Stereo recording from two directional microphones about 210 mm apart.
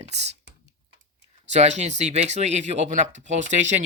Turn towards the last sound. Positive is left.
turn(degrees=-35)  # may be behind; listen again after turning